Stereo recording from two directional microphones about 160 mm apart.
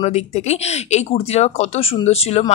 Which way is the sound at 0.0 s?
45° left (ahead or behind).